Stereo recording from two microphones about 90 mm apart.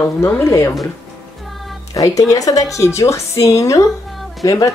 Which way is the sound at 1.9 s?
40° left (ahead or behind).